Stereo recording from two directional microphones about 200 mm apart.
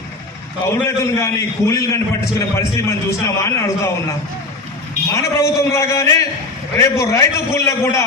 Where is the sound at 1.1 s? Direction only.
15° left (ahead or behind).